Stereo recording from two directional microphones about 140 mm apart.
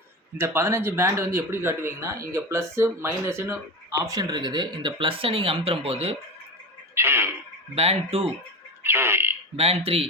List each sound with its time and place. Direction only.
0.3 s speech: 20° right (ahead or behind); by 6.1 s 45° right (ahead or behind)
6.9 s speech: 15° right (ahead or behind)
7.8 s speech: 45° right (ahead or behind)
8.8 s speech: 15° right (ahead or behind)
9.6 s speech: 45° right (ahead or behind)